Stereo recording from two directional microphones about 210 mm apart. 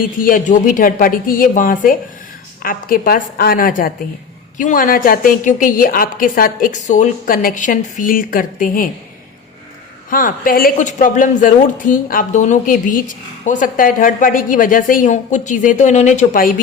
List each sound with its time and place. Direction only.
0.2 s a woman's voice: 40° left (ahead or behind)
10.1 s speech: 40° left (ahead or behind)